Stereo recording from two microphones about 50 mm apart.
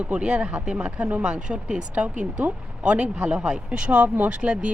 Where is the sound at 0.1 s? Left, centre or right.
Right.